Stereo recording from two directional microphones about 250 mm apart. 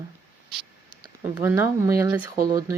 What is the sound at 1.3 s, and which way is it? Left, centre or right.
Speech, centre.